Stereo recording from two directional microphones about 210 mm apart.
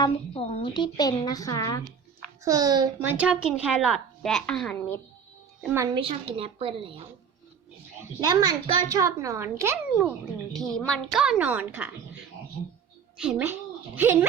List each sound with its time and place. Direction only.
0.0 s a woman's voice: 25° left (ahead or behind)
2.4 s a woman's voice: 15° right (ahead or behind)
3.0 s a woman's voice: 10° right (ahead or behind)
5.7 s a woman's voice: 20° right (ahead or behind)
8.2 s a child's voice: 20° right (ahead or behind)
10.5 s a woman's voice: centre (ahead or behind)
13.1 s a woman's voice: 5° right (ahead or behind)